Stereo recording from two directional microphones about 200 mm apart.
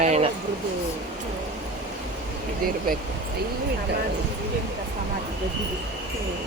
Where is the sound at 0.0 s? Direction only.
35° right (ahead or behind).